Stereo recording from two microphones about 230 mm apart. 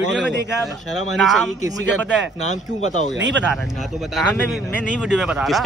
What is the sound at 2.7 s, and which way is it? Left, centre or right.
Speech, left.